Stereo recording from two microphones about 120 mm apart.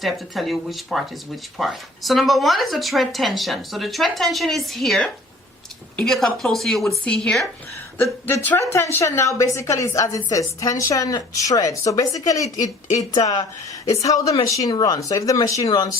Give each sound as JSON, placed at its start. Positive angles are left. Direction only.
{"t": 0.0, "sound": "speech", "side_deg": 0}
{"t": 8.3, "sound": "a woman's voice", "side_deg": 20}